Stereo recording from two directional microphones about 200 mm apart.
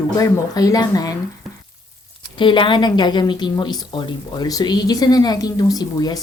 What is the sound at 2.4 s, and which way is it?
A woman's voice, 25° left (ahead or behind).